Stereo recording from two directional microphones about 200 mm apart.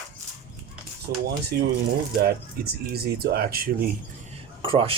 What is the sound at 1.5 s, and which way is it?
Speech, 50° right (ahead or behind).